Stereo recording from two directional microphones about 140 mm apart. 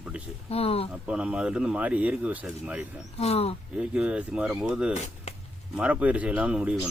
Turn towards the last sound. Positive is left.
turn(degrees=-10)  # may be behind; listen again after turning